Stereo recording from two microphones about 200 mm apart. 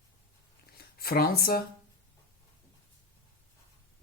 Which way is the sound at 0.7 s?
50° left (ahead or behind).